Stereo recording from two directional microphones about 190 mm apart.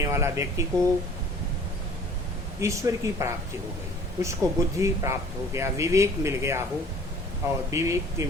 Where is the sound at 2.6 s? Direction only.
15° right (ahead or behind).